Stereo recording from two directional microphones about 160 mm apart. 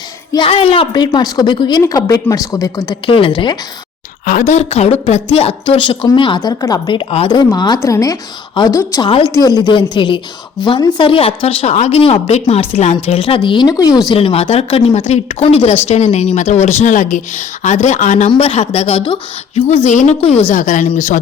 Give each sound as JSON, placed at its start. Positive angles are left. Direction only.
{"t": 0.3, "sound": "a woman's voice", "side_deg": 35}
{"t": 3.1, "sound": "speech", "side_deg": 35}
{"t": 4.3, "sound": "a woman's voice", "side_deg": 50}
{"t": 9.0, "sound": "speech", "side_deg": 35}
{"t": 9.3, "sound": "a woman's voice", "side_deg": 25}
{"t": 14.1, "sound": "speech", "side_deg": 35}
{"t": 19.8, "sound": "speech", "side_deg": 45}